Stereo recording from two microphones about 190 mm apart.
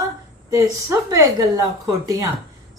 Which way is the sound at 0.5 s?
15° right (ahead or behind).